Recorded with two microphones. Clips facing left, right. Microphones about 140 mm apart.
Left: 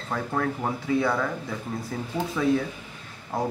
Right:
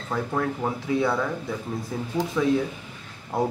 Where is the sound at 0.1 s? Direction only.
Centre (ahead or behind).